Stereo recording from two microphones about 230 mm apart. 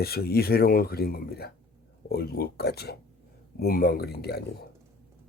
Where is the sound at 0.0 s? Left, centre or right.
Left.